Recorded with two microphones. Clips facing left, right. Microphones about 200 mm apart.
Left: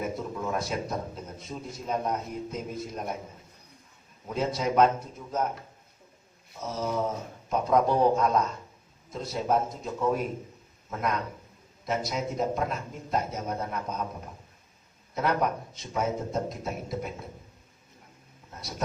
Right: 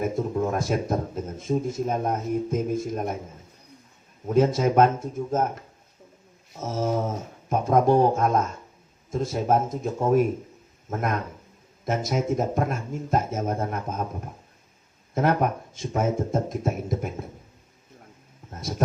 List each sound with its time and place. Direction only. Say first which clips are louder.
0.0 s a man's voice: right 7 dB; 45° right (ahead or behind)
4.3 s a man's voice: right 8 dB; 50° right (ahead or behind)
6.6 s a man's voice: right 4 dB; 45° right (ahead or behind)
15.1 s a man's voice: right 4 dB; 50° right (ahead or behind)